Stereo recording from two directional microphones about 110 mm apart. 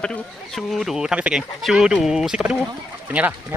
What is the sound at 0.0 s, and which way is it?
Speech, 5° left (ahead or behind).